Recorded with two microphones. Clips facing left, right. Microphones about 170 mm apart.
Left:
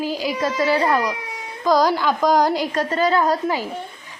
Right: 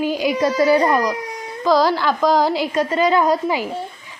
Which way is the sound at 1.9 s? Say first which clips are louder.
Right 1 dB; 10° left (ahead or behind).